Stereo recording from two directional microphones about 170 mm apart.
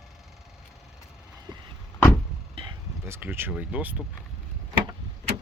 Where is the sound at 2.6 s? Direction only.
35° right (ahead or behind).